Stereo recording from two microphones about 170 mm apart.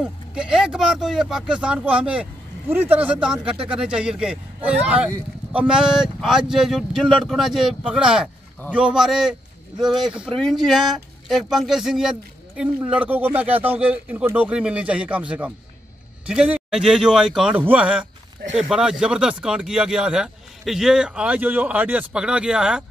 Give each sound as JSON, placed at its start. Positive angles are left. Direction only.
{"t": 0.0, "sound": "a man's voice", "side_deg": -5}